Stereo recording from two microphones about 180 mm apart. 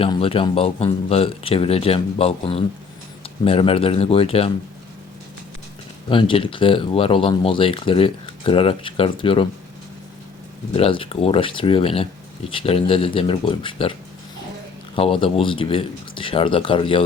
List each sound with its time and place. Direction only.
0.0 s speech: 30° left (ahead or behind)
6.1 s speech: 30° left (ahead or behind)
10.7 s speech: 30° left (ahead or behind)
14.9 s speech: 30° left (ahead or behind)